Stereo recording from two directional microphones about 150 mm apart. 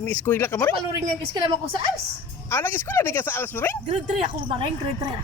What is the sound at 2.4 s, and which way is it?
Speech, 15° left (ahead or behind).